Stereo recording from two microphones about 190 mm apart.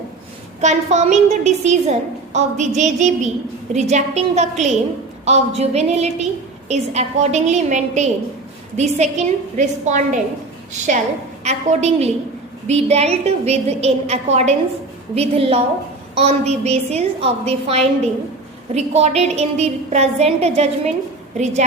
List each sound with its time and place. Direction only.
0.6 s a woman's voice: 35° right (ahead or behind)
11.4 s a woman's voice: 35° right (ahead or behind)